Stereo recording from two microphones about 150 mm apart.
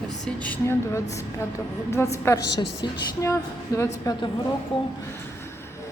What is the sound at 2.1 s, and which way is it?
Speech, 20° left (ahead or behind).